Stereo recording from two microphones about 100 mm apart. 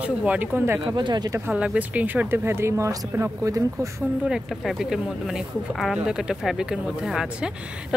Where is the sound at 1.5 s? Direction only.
15° right (ahead or behind); by 3.8 s 35° right (ahead or behind).